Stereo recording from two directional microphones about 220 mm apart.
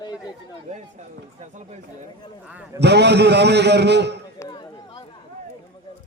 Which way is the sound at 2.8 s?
50° right (ahead or behind).